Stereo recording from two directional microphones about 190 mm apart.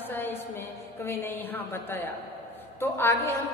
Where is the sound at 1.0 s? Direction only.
10° left (ahead or behind).